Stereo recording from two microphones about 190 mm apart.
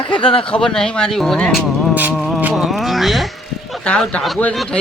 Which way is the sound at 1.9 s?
5° right (ahead or behind).